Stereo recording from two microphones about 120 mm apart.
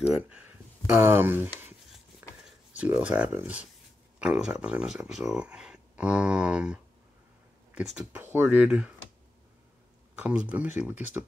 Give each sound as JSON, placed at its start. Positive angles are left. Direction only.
{"t": 0.0, "sound": "speech", "side_deg": -10}
{"t": 8.1, "sound": "speech", "side_deg": -20}
{"t": 10.2, "sound": "speech", "side_deg": -10}